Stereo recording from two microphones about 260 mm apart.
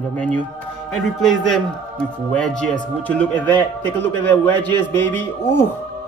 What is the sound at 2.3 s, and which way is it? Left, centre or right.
A man's voice, centre.